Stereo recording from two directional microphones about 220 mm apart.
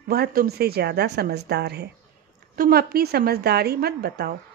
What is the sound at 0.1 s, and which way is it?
Speech, 45° right (ahead or behind).